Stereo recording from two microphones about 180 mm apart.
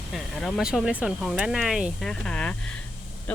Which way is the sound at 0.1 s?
Centre (ahead or behind).